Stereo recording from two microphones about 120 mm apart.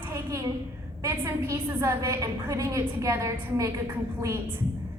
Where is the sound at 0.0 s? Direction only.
25° right (ahead or behind).